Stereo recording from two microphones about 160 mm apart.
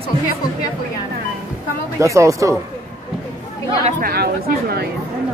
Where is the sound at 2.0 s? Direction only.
20° right (ahead or behind).